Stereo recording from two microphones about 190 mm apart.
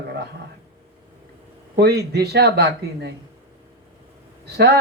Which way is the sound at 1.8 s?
55° right (ahead or behind).